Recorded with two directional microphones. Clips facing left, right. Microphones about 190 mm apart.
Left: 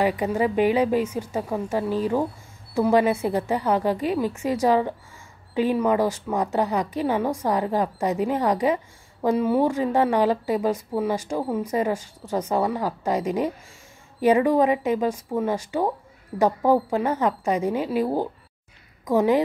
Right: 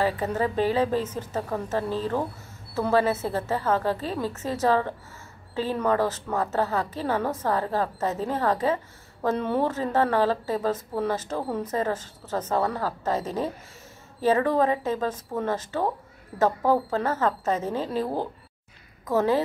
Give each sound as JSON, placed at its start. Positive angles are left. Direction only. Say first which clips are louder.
{"t": 0.0, "sound": "a woman's voice", "louder": "left 3 dB", "side_deg": 15}